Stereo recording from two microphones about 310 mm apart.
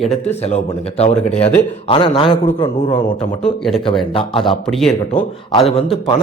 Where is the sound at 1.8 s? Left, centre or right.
Centre.